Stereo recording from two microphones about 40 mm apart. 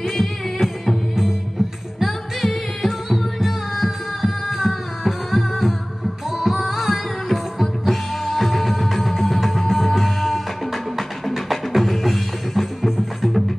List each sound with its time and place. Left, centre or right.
0.1 s music: centre